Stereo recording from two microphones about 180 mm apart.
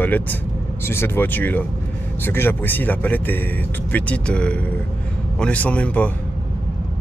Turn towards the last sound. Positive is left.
turn(degrees=5)  # may be behind; listen again after turning